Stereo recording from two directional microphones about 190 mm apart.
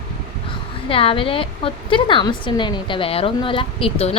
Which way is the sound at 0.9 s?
30° left (ahead or behind).